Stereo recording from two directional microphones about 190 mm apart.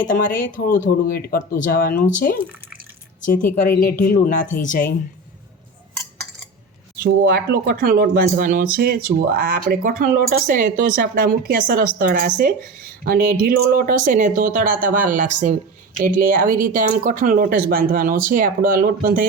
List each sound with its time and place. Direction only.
0.0 s speech: 45° left (ahead or behind)
3.7 s speech: 50° left (ahead or behind)
7.0 s speech: 55° right (ahead or behind)